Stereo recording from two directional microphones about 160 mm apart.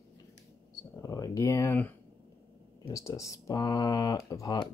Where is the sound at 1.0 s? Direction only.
20° left (ahead or behind).